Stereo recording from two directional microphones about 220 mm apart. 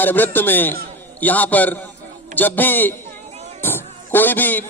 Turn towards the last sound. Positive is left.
turn(degrees=10)  # may be behind; listen again after turning